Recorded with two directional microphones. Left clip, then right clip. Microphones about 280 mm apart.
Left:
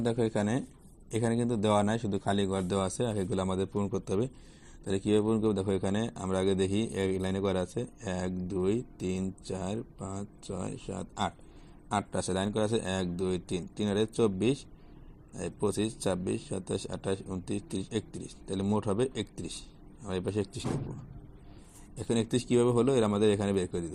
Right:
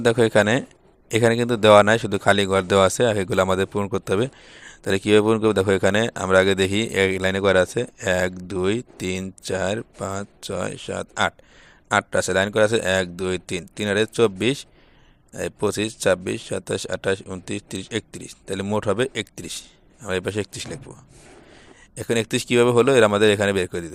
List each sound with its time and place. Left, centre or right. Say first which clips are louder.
0.0 s a man's voice: right 13 dB; right
21.9 s a man's voice: right 8 dB; right